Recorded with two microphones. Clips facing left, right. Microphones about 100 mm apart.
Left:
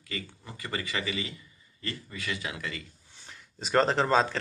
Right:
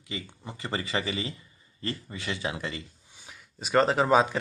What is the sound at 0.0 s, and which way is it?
Speech, 20° right (ahead or behind).